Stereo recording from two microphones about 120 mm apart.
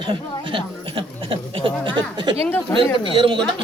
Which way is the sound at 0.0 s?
45° right (ahead or behind).